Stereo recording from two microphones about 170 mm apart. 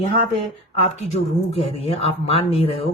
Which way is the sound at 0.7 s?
35° left (ahead or behind).